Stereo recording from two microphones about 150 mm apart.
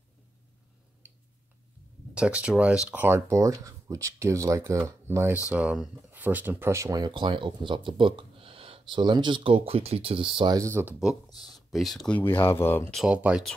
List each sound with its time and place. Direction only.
2.1 s speech: 5° right (ahead or behind)
11.2 s speech: 25° left (ahead or behind)
11.7 s speech: centre (ahead or behind)
12.2 s speech: 15° left (ahead or behind)
12.9 s speech: 5° right (ahead or behind)